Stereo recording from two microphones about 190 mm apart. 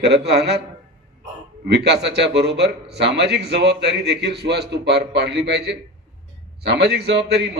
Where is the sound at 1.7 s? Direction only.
65° right (ahead or behind).